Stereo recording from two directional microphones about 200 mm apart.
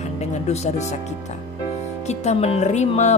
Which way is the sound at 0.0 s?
35° left (ahead or behind).